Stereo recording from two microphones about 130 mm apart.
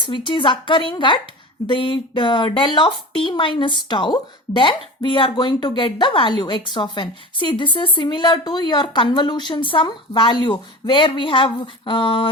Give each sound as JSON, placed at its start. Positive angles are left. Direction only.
{"t": 0.0, "sound": "speech", "side_deg": 40}